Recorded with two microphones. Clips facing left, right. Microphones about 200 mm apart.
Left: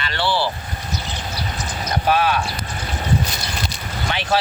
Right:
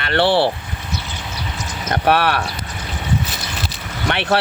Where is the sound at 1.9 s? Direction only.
65° right (ahead or behind).